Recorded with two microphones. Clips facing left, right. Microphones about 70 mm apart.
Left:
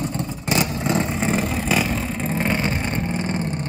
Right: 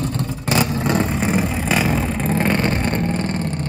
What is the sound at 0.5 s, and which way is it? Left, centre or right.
Vehicle, centre.